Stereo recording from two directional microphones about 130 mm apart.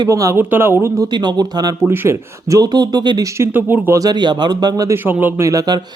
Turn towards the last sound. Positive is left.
turn(degrees=-30)  # may be behind; listen again after turning